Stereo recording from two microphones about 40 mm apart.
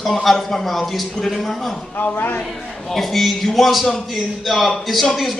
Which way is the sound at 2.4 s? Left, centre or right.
Centre.